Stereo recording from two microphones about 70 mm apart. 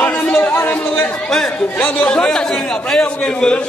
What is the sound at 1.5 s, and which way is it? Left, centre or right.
A man's voice, left.